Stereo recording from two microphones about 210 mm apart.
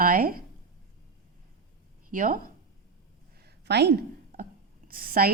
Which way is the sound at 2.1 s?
40° right (ahead or behind).